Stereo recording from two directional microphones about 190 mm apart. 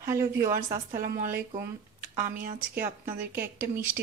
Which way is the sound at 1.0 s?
50° right (ahead or behind).